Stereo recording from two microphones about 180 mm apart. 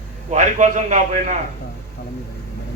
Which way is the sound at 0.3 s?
45° right (ahead or behind).